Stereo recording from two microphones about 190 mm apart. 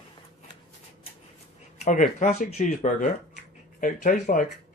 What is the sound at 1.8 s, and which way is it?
Speech, 40° left (ahead or behind).